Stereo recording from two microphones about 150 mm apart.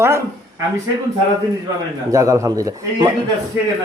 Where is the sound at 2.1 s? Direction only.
20° right (ahead or behind).